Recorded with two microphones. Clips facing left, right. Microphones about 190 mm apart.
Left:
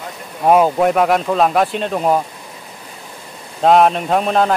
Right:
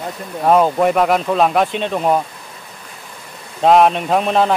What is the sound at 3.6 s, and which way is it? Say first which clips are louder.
Speech: even; centre (ahead or behind).